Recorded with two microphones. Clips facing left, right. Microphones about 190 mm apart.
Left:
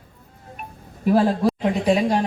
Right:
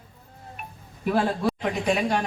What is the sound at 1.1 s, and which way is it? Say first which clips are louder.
A woman's voice: left 6 dB; 35° left (ahead or behind).